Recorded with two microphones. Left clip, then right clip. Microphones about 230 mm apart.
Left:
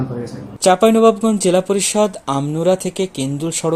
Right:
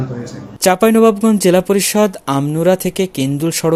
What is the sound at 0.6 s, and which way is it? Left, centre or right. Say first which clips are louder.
Speech: even; right.